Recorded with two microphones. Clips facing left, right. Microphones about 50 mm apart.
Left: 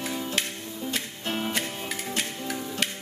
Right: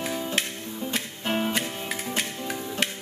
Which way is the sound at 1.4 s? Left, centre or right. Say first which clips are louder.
Right 2 dB; centre.